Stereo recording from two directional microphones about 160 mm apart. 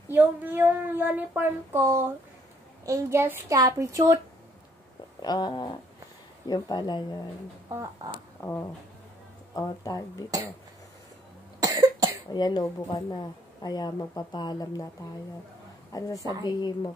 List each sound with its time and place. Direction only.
0.1 s a child's voice: 10° right (ahead or behind)
5.2 s speech: 25° left (ahead or behind)
8.4 s speech: 15° left (ahead or behind)
11.6 s cough: 25° right (ahead or behind)
12.3 s speech: 25° left (ahead or behind)
15.9 s speech: 20° left (ahead or behind)